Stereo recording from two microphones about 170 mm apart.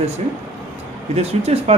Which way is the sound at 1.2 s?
40° right (ahead or behind).